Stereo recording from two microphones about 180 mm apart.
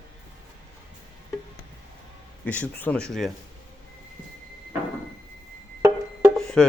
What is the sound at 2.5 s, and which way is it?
Speech, 10° left (ahead or behind).